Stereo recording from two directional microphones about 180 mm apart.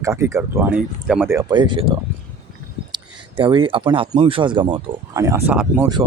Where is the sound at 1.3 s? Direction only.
25° right (ahead or behind).